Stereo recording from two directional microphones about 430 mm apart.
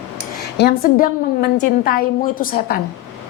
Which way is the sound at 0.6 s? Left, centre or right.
Left.